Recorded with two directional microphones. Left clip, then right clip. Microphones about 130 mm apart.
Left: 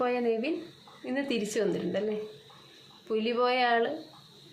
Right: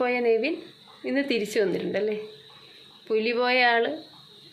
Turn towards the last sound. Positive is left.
turn(degrees=-15)  # may be behind; listen again after turning